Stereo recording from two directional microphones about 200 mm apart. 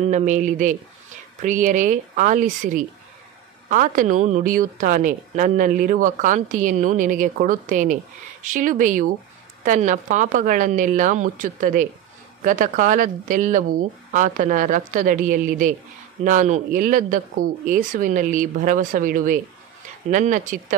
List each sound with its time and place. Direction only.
0.0 s a woman's voice: 40° right (ahead or behind)